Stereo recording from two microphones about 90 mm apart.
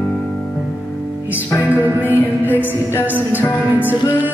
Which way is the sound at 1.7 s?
20° right (ahead or behind).